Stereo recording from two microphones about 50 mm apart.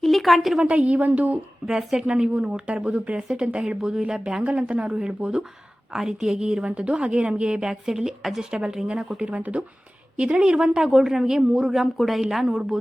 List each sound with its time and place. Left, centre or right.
0.0 s a sound: centre
0.6 s speech: right
1.6 s a woman's voice: centre
4.4 s a woman's voice: right